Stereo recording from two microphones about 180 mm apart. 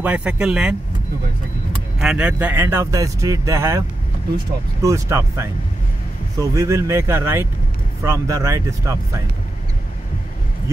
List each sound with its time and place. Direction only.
0.0 s speech: 10° right (ahead or behind)
2.0 s speech: 5° right (ahead or behind)
4.8 s speech: 15° right (ahead or behind)